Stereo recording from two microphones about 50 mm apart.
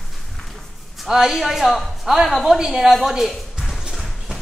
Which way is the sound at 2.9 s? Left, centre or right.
Centre.